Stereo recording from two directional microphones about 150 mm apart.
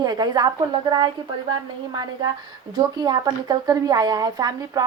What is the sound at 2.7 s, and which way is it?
A woman's voice, 25° right (ahead or behind).